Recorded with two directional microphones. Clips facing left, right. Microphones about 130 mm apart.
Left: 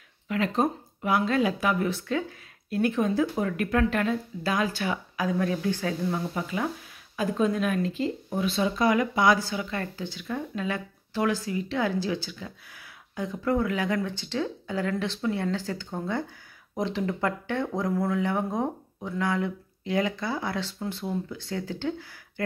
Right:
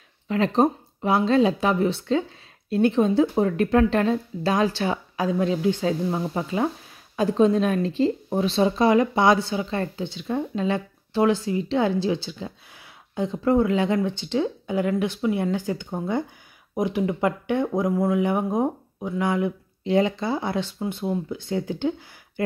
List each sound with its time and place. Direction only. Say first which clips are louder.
0.3 s speech: right 5 dB; 30° right (ahead or behind)